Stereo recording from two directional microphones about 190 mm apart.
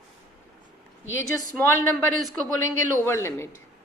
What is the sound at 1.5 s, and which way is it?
A woman's voice, 10° left (ahead or behind).